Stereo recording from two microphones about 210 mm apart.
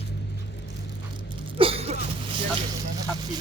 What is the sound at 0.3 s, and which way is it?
Vehicle, 55° left (ahead or behind).